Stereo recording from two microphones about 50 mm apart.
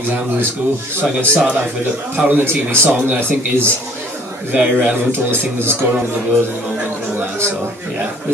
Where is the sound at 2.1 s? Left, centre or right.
Right.